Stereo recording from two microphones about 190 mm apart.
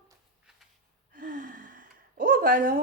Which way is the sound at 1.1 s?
45° right (ahead or behind).